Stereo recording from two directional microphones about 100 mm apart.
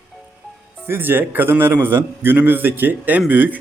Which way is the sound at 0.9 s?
20° right (ahead or behind).